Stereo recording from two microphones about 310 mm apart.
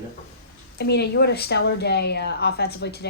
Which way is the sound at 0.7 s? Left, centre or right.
Left.